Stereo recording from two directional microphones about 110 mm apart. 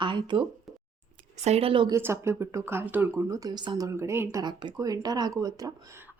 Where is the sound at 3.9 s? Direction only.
25° right (ahead or behind).